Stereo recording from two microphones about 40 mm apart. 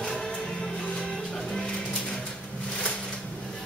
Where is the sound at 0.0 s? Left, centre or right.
Centre.